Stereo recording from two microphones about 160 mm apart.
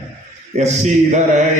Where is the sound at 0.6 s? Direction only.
45° right (ahead or behind).